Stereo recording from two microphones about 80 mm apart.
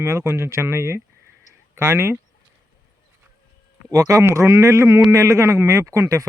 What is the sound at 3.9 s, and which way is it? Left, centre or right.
Speech, right.